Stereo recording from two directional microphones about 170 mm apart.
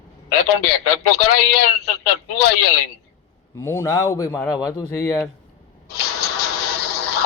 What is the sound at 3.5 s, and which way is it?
A man's voice, 15° left (ahead or behind).